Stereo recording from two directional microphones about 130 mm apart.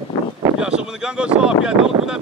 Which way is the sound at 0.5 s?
5° right (ahead or behind).